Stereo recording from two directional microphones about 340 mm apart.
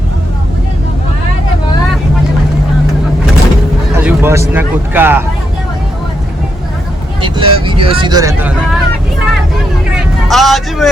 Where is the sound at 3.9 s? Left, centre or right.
Centre.